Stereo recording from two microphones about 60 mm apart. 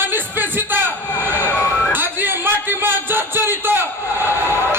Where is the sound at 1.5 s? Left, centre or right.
Left.